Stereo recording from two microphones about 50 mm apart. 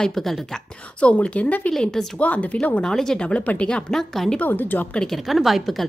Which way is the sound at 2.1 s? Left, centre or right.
Left.